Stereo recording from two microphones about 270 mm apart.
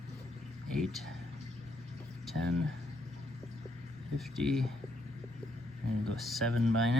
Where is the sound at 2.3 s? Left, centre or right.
Right.